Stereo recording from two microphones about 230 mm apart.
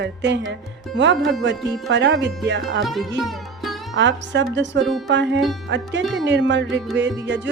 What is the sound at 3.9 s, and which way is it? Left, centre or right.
Speech, right.